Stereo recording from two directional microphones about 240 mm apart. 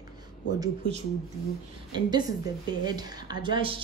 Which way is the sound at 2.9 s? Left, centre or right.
Centre.